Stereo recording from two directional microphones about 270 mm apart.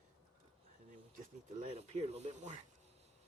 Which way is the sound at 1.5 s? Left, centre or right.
Right.